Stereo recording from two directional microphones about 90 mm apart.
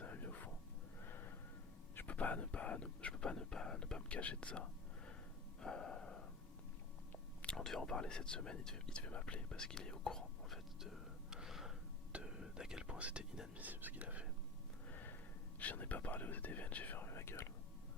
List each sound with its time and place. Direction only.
0.0 s whispering: 20° left (ahead or behind)
1.0 s a sound: 25° left (ahead or behind)
2.0 s speech: 15° left (ahead or behind)
5.5 s gasp: 10° left (ahead or behind)
7.5 s speech: 5° left (ahead or behind)
12.1 s whispering: 10° right (ahead or behind)
13.7 s speech: 20° right (ahead or behind)
14.8 s a sound: 20° left (ahead or behind)
15.5 s speech: 20° left (ahead or behind)